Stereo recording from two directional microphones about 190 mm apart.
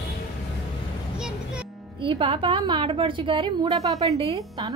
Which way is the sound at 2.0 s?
25° right (ahead or behind).